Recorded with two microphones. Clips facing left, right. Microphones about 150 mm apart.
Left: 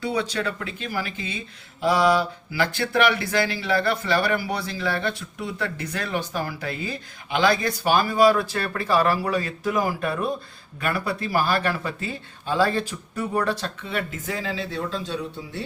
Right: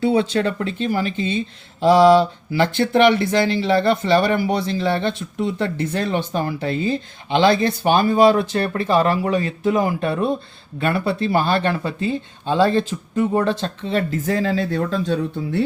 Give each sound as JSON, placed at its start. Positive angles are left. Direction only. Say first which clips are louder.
{"t": 0.0, "sound": "speech", "louder": "right 8 dB", "side_deg": -25}